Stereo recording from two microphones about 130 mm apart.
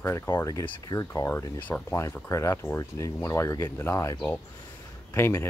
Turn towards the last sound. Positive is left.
turn(degrees=20)  # may be behind; listen again after turning